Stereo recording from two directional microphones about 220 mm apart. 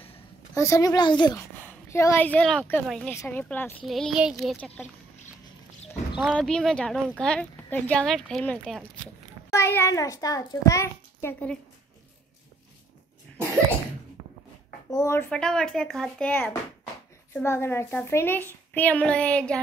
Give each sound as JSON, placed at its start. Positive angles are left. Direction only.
{"t": 0.6, "sound": "a child's voice", "side_deg": 15}
{"t": 6.1, "sound": "a child's voice", "side_deg": 0}
{"t": 14.9, "sound": "a child's voice", "side_deg": 15}